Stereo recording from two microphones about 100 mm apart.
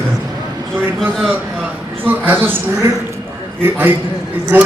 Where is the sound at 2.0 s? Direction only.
20° right (ahead or behind).